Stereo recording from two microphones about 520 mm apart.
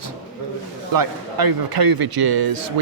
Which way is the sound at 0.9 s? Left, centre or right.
Right.